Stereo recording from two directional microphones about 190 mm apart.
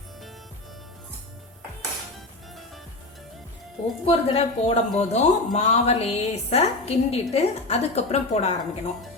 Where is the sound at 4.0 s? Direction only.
30° left (ahead or behind).